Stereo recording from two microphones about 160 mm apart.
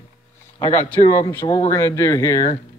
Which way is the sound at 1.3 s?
15° left (ahead or behind).